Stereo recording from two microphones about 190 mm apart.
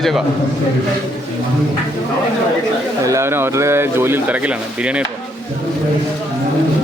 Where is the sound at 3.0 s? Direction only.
15° right (ahead or behind).